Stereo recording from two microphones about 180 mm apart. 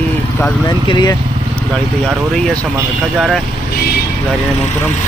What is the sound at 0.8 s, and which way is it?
Speech, 25° left (ahead or behind).